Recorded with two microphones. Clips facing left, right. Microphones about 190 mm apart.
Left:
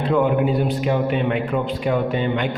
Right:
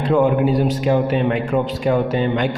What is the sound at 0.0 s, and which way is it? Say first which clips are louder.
A man's voice: right 2 dB; 45° right (ahead or behind).